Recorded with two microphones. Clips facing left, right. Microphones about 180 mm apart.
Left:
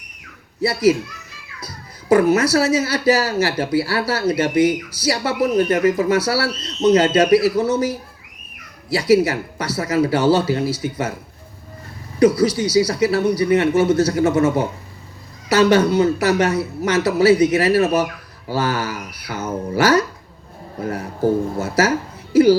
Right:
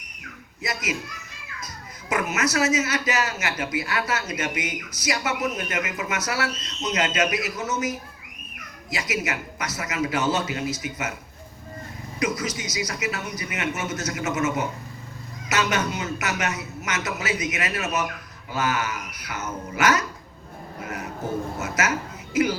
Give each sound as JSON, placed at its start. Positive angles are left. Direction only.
{"t": 0.6, "sound": "a child's voice", "side_deg": 35}
{"t": 12.2, "sound": "a child's voice", "side_deg": 35}